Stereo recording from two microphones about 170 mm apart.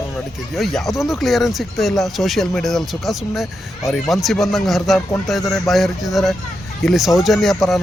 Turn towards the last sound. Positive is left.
turn(degrees=0)  # may be behind; listen again after turning